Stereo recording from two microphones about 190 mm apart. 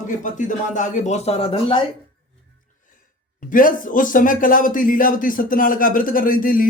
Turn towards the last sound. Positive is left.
turn(degrees=45)  # may be behind; listen again after turning